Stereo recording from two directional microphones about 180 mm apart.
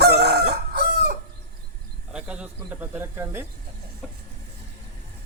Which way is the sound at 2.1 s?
5° right (ahead or behind).